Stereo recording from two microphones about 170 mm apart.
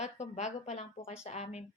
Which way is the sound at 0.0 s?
45° left (ahead or behind).